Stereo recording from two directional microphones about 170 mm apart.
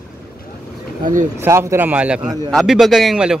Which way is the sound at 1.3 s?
15° right (ahead or behind).